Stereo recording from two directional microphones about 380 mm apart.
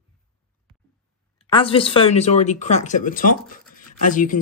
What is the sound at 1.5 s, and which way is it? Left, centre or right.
Speech, centre.